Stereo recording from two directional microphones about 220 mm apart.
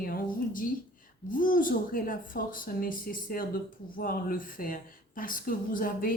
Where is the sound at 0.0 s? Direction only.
40° left (ahead or behind).